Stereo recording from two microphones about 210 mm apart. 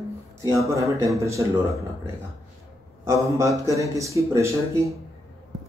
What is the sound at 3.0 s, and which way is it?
A man's voice, 15° right (ahead or behind).